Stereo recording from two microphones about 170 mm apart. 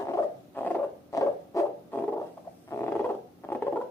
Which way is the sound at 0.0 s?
15° left (ahead or behind).